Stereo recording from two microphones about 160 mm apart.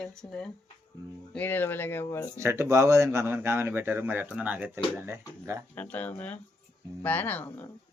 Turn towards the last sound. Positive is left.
turn(degrees=10)  # may be behind; listen again after turning